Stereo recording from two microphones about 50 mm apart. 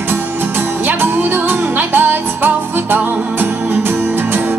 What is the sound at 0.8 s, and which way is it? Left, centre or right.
Music, right.